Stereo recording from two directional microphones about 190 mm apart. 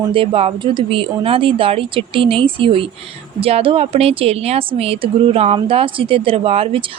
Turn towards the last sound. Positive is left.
turn(degrees=-30)  # may be behind; listen again after turning